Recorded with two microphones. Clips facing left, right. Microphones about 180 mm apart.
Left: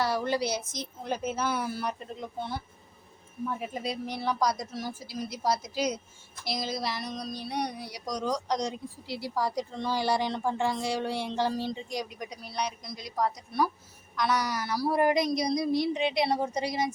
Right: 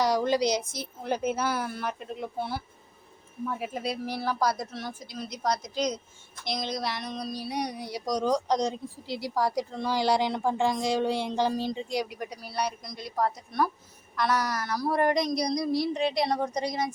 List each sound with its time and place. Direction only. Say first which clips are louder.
0.0 s a woman's voice: right 4 dB; 15° right (ahead or behind)
4.7 s a woman's voice: left 1 dB; 10° left (ahead or behind); by 7.9 s 10° right (ahead or behind)
7.9 s speech: right 6 dB; 35° right (ahead or behind)
9.0 s speech: right 3 dB; 15° right (ahead or behind)
12.1 s speech: right 3 dB; 60° right (ahead or behind)
12.4 s a woman's voice: right 2 dB; 5° right (ahead or behind)